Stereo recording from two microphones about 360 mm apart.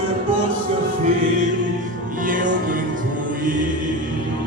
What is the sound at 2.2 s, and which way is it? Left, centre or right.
Music, right.